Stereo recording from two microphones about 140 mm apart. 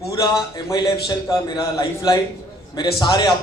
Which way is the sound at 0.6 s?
30° left (ahead or behind).